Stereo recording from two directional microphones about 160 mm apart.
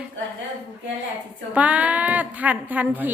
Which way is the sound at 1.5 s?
10° right (ahead or behind).